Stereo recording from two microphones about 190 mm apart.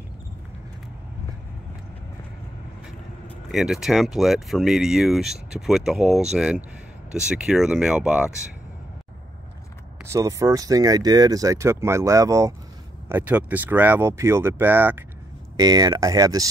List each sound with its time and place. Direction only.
3.5 s speech: centre (ahead or behind)
10.0 s speech: 15° right (ahead or behind)